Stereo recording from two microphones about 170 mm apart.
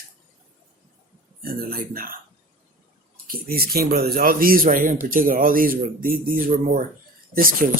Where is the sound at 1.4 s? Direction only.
60° right (ahead or behind).